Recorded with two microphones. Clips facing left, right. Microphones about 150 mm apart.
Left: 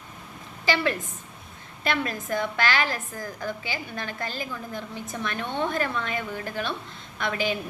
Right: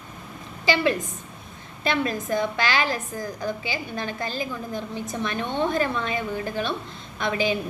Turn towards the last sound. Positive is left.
turn(degrees=-20)  # may be behind; listen again after turning